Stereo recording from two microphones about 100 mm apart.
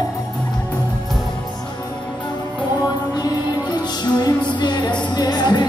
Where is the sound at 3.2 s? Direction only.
45° left (ahead or behind).